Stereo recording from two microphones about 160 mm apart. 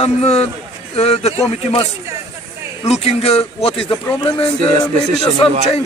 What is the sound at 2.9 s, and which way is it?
Speech, 40° left (ahead or behind).